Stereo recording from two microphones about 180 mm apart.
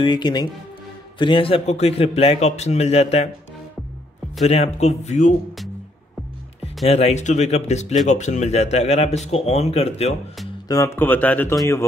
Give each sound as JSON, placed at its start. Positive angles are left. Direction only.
{"t": 0.0, "sound": "a man's voice", "side_deg": 25}
{"t": 4.4, "sound": "a man's voice", "side_deg": 35}
{"t": 6.9, "sound": "a man's voice", "side_deg": 35}
{"t": 10.7, "sound": "speech", "side_deg": 15}